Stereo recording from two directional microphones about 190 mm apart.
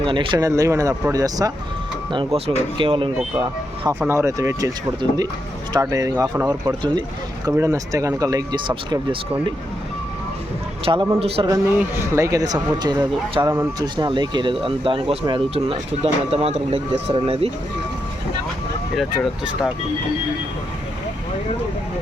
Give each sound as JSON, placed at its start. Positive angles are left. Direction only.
{"t": 0.0, "sound": "speech", "side_deg": -25}
{"t": 2.1, "sound": "speech", "side_deg": -30}
{"t": 4.0, "sound": "speech", "side_deg": -15}
{"t": 5.7, "sound": "speech", "side_deg": -20}
{"t": 10.8, "sound": "speech", "side_deg": -30}
{"t": 11.4, "sound": "speech", "side_deg": -15}